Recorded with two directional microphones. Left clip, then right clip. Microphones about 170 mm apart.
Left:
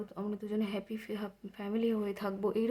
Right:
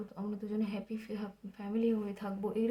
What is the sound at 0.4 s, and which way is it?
Speech, 30° left (ahead or behind).